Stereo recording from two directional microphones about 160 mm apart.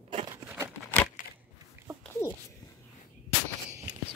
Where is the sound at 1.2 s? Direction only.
60° left (ahead or behind).